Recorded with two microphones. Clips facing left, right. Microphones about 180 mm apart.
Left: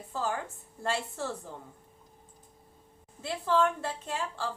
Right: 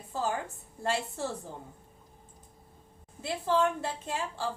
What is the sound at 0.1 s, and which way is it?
A woman's voice, 15° right (ahead or behind).